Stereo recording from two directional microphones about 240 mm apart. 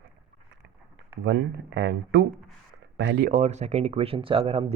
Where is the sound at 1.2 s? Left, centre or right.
Right.